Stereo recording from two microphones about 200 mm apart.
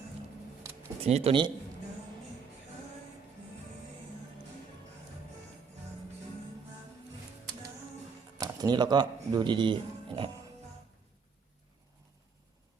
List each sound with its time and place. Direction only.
1.0 s speech: 30° right (ahead or behind)
8.4 s speech: 20° right (ahead or behind)